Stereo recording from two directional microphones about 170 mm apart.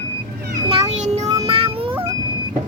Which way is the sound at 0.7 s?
40° right (ahead or behind).